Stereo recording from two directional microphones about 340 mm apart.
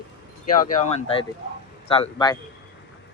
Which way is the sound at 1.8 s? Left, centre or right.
Centre.